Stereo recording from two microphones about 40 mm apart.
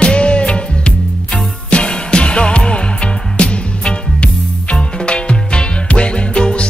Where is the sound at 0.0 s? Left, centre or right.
Left.